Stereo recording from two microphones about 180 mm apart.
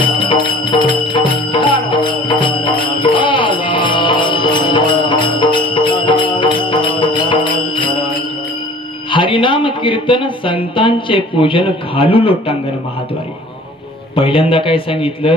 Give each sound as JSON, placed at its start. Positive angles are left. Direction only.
{"t": 0.0, "sound": "music", "side_deg": 25}
{"t": 7.0, "sound": "mantra", "side_deg": 25}
{"t": 9.1, "sound": "speech", "side_deg": 25}
{"t": 14.1, "sound": "a man's voice", "side_deg": 30}